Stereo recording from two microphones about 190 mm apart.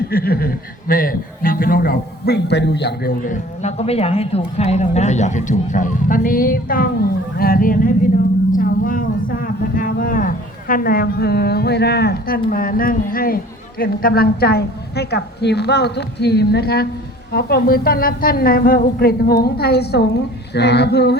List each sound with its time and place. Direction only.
0.1 s a man's voice: 50° left (ahead or behind)
3.2 s a man's voice: 40° left (ahead or behind); by 21.2 s 60° left (ahead or behind)